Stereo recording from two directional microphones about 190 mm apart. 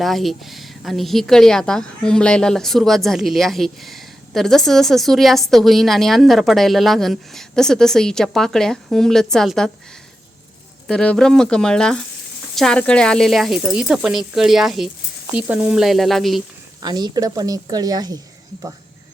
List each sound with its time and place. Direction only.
0.0 s a woman's voice: centre (ahead or behind)
10.8 s a woman's voice: 5° left (ahead or behind)
16.8 s a woman's voice: 20° right (ahead or behind)